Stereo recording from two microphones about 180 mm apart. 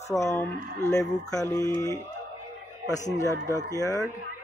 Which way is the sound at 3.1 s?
20° left (ahead or behind).